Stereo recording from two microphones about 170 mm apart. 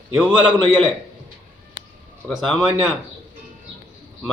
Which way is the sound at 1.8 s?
90° right.